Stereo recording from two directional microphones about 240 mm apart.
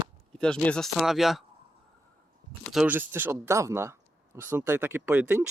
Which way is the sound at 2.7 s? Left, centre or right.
Centre.